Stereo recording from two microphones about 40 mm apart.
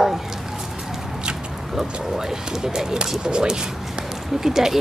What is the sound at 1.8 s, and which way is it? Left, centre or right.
Speech, centre.